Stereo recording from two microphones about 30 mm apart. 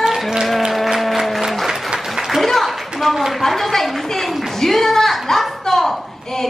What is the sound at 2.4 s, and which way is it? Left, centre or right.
Clapping, centre.